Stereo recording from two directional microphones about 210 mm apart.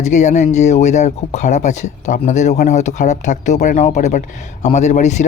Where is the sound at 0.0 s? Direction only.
35° left (ahead or behind).